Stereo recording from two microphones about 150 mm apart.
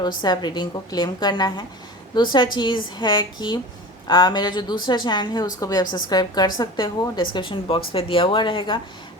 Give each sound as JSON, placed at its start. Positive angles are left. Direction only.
{"t": 0.2, "sound": "a woman's voice", "side_deg": 30}